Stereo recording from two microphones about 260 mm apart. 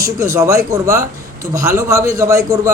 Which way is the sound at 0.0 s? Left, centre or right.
Centre.